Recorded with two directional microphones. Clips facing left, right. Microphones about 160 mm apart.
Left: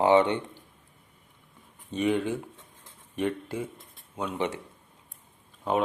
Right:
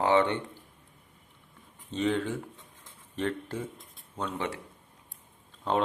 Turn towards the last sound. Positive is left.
turn(degrees=10)  # may be behind; listen again after turning